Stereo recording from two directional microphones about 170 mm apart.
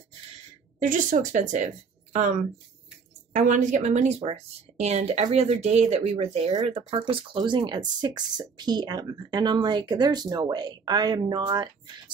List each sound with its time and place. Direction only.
0.8 s a woman's voice: 50° right (ahead or behind); by 11.7 s 25° right (ahead or behind)